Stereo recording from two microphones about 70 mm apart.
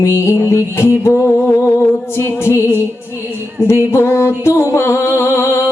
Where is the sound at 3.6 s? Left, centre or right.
Left.